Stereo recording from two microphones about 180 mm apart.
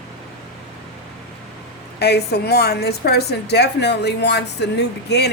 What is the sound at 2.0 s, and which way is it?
A woman's voice, 65° left (ahead or behind).